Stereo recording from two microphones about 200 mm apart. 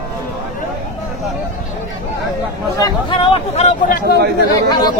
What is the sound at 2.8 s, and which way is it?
Speech, 20° left (ahead or behind).